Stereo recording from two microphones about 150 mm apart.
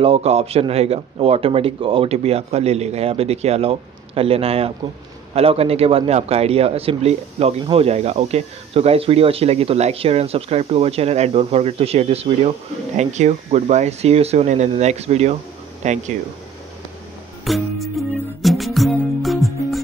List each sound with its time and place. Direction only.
0.0 s speech: 40° right (ahead or behind)
17.5 s music: centre (ahead or behind)